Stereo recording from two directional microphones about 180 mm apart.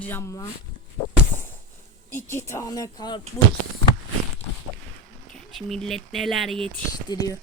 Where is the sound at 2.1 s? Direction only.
15° left (ahead or behind).